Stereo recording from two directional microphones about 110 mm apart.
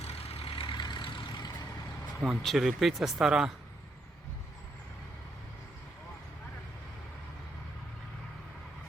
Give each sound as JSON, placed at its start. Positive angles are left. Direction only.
{"t": 0.0, "sound": "vehicle", "side_deg": 65}
{"t": 2.2, "sound": "speech", "side_deg": 0}